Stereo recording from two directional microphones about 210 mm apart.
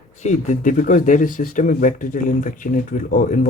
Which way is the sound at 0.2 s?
35° left (ahead or behind).